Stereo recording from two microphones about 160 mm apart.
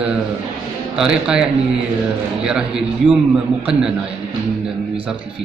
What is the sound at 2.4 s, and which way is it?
A man's voice, 5° right (ahead or behind).